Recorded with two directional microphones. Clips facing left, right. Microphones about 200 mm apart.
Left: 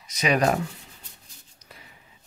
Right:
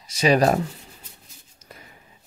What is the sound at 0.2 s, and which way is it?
Speech, 35° right (ahead or behind).